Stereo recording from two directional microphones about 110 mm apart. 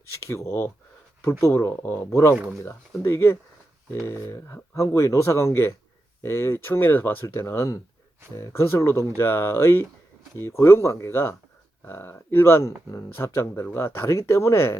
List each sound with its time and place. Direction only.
0.3 s speech: 25° left (ahead or behind)
2.3 s speech: 10° right (ahead or behind)
3.0 s speech: 25° left (ahead or behind)